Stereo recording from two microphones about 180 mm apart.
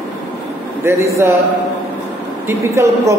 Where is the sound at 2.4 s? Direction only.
15° right (ahead or behind).